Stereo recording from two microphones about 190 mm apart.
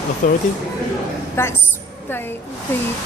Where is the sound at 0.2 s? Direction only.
45° left (ahead or behind).